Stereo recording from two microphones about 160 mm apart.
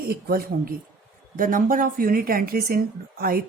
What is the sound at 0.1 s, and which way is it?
A woman's voice, 65° right (ahead or behind).